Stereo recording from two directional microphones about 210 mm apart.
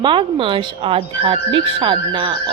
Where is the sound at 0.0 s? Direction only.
25° right (ahead or behind).